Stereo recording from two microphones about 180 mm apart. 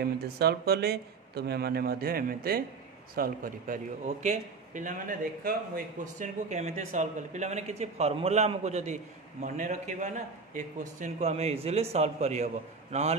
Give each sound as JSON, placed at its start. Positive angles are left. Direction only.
{"t": 0.0, "sound": "a man's voice", "side_deg": -60}